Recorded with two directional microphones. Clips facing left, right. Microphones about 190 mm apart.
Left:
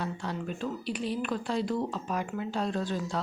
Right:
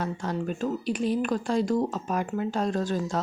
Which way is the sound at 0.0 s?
45° right (ahead or behind).